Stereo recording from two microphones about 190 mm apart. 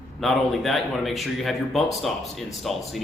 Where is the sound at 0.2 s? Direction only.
Centre (ahead or behind).